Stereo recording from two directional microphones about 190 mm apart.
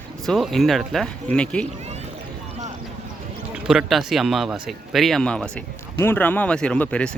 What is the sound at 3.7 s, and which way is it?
A man's voice, centre (ahead or behind).